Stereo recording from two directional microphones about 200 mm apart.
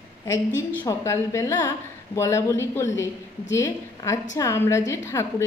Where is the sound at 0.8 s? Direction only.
15° left (ahead or behind).